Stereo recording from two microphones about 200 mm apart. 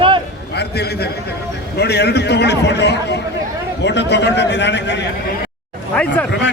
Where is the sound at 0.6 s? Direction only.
55° left (ahead or behind).